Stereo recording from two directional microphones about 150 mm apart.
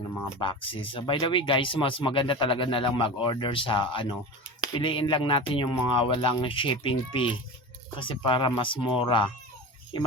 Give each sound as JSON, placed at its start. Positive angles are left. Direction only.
{"t": 0.3, "sound": "speech", "side_deg": 35}